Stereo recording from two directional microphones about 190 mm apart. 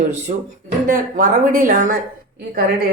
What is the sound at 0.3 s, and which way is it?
Speech, 40° right (ahead or behind).